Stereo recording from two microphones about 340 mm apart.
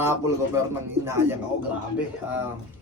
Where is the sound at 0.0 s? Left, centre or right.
Centre.